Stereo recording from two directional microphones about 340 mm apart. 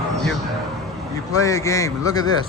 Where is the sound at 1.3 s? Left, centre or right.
Centre.